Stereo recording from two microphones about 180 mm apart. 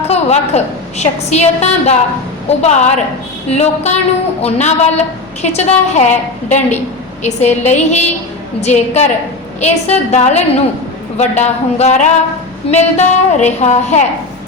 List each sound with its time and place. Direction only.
0.1 s a woman's voice: 35° left (ahead or behind)